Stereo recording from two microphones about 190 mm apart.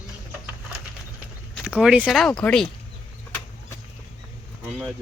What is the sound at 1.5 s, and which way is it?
Speech, 5° right (ahead or behind).